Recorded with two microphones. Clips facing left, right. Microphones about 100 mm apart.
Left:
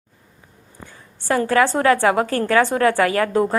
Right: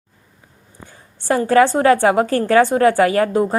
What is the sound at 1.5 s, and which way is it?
A woman's voice, 30° right (ahead or behind).